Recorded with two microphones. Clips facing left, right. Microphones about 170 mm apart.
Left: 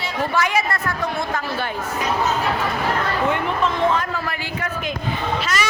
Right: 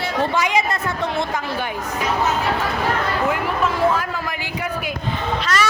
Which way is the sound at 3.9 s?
10° right (ahead or behind).